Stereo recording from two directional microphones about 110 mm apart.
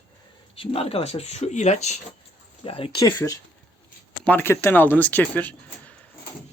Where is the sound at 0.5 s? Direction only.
60° left (ahead or behind); by 2.0 s 90° left.